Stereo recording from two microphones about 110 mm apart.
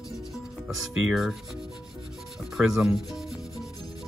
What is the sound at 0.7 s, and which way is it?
Speech, 5° right (ahead or behind).